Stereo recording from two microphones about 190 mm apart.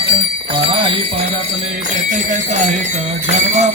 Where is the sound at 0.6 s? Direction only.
30° right (ahead or behind).